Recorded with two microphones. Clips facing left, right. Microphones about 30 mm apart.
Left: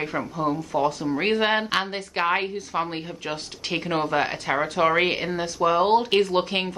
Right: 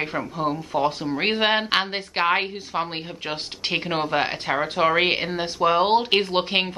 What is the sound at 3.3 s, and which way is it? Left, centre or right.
Speech, right.